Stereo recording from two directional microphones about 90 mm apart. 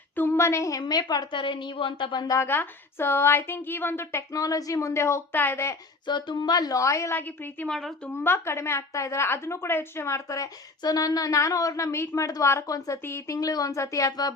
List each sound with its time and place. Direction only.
0.2 s a woman's voice: 25° left (ahead or behind); by 2.2 s 65° left (ahead or behind)
2.4 s speech: 25° left (ahead or behind)
4.3 s a woman's voice: 40° left (ahead or behind); by 5.7 s 25° left (ahead or behind)
6.1 s a woman's voice: 55° left (ahead or behind); by 7.2 s 35° left (ahead or behind)
7.2 s speech: 20° left (ahead or behind)
7.7 s a woman's voice: 5° left (ahead or behind)
8.2 s a woman's voice: 30° left (ahead or behind)